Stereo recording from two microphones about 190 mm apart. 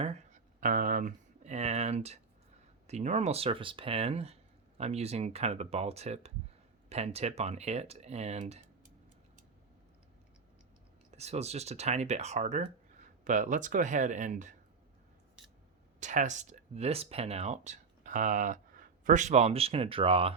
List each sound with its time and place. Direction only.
0.0 s a sound: 35° right (ahead or behind)
2.8 s speech: 35° right (ahead or behind)
11.1 s speech: 35° right (ahead or behind)
16.0 s speech: 40° right (ahead or behind)